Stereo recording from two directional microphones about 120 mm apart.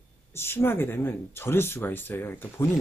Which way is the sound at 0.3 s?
20° left (ahead or behind).